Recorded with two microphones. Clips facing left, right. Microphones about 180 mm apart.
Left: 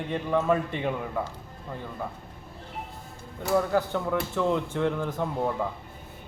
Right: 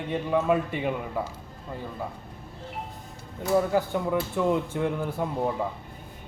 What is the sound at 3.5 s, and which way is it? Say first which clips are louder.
A man's voice: right 1 dB; 15° right (ahead or behind).